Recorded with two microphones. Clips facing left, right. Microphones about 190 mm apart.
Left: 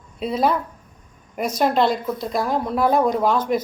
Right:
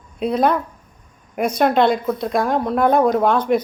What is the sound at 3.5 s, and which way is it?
Speech, 60° right (ahead or behind).